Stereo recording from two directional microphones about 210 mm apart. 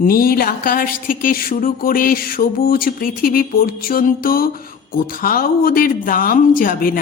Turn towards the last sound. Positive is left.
turn(degrees=40)  # may be behind; listen again after turning